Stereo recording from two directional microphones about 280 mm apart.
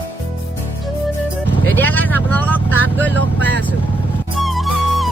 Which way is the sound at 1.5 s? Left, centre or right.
Centre.